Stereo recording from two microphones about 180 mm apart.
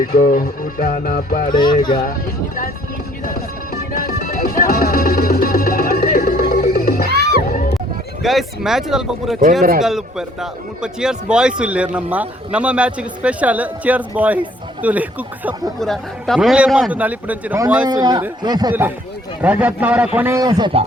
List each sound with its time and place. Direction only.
0.1 s music: 50° left (ahead or behind)
1.5 s speech: 25° left (ahead or behind)
3.9 s music: 55° left (ahead or behind)
7.1 s crowd: 65° right (ahead or behind)
8.2 s a man's voice: centre (ahead or behind)
15.8 s a man's voice: centre (ahead or behind)
17.8 s a man's voice: 20° right (ahead or behind)
18.7 s a man's voice: 10° right (ahead or behind); by 20.8 s 25° right (ahead or behind)